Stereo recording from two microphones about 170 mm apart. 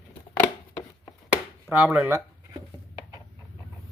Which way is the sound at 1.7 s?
10° right (ahead or behind).